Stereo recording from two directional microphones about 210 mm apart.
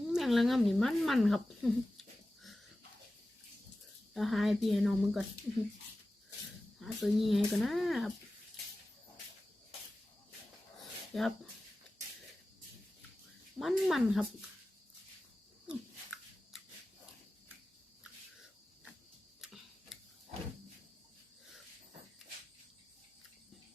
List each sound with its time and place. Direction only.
0.1 s speech: centre (ahead or behind)
4.1 s speech: centre (ahead or behind)
6.7 s speech: centre (ahead or behind)
10.8 s a sound: centre (ahead or behind)
13.6 s speech: centre (ahead or behind)
19.4 s tick-tock: centre (ahead or behind)